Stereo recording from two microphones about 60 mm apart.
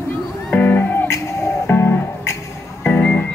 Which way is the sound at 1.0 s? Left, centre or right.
Left.